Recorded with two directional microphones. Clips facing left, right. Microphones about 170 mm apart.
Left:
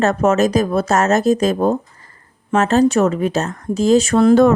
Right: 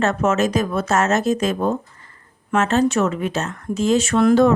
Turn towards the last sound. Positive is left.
turn(degrees=50)  # may be behind; listen again after turning